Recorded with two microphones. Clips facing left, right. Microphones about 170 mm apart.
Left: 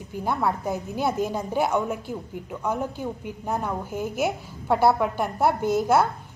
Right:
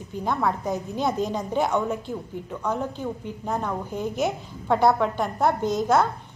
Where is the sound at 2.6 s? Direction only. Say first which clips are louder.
Even; 15° left (ahead or behind).